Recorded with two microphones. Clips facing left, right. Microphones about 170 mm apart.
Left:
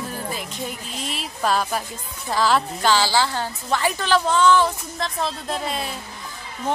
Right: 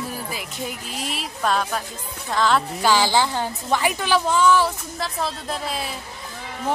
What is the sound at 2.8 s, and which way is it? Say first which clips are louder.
A woman's voice: right 3 dB; 15° right (ahead or behind).